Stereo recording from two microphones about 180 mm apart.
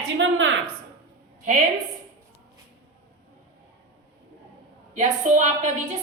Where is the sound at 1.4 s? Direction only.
45° right (ahead or behind).